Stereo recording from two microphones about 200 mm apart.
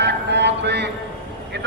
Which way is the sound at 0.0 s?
60° right (ahead or behind).